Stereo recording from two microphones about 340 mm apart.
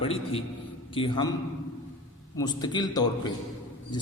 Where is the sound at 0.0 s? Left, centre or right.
Centre.